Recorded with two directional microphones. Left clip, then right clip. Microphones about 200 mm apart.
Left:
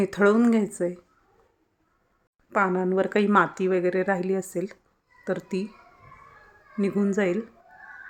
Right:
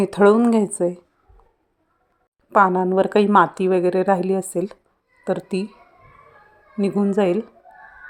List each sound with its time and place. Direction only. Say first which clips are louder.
0.0 s a woman's voice: right 6 dB; 15° right (ahead or behind)
2.5 s a woman's voice: right 8 dB; 20° right (ahead or behind)
6.7 s a woman's voice: right 5 dB; 10° right (ahead or behind)